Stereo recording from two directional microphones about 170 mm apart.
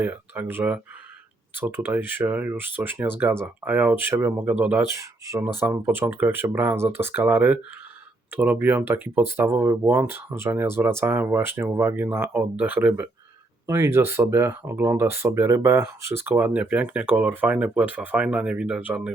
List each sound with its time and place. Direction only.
0.0 s speech: 10° right (ahead or behind)